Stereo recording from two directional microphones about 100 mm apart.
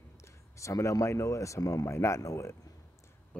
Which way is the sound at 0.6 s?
30° left (ahead or behind).